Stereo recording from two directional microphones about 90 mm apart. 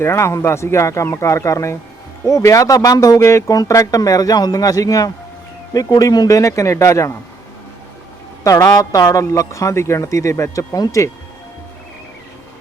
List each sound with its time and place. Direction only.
0.0 s speech: 30° left (ahead or behind)
8.4 s speech: 40° left (ahead or behind)